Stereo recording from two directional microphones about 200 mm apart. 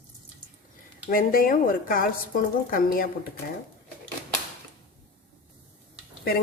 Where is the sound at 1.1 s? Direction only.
45° left (ahead or behind).